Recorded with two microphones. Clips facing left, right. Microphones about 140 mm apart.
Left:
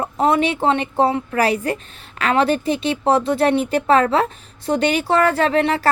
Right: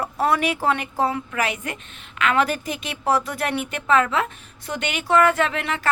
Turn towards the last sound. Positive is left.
turn(degrees=35)  # may be behind; listen again after turning